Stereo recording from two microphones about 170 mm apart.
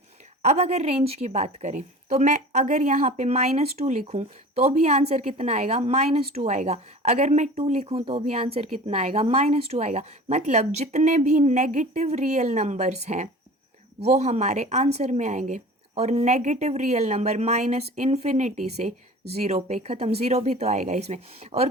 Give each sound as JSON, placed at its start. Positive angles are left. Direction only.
{"t": 0.4, "sound": "a woman's voice", "side_deg": -40}